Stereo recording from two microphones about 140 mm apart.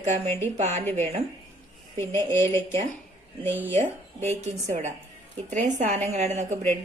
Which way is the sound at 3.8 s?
60° right (ahead or behind).